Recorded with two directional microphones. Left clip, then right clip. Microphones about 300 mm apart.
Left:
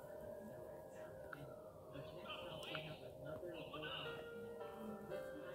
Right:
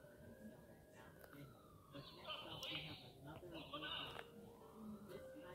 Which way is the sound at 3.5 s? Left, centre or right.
Right.